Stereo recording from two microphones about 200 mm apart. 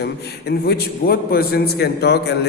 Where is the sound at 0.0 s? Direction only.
50° left (ahead or behind).